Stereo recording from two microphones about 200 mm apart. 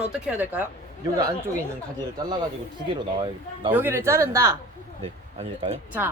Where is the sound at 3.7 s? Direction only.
10° right (ahead or behind).